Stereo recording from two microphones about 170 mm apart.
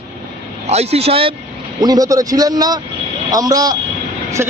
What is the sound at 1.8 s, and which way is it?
Speech, 20° right (ahead or behind).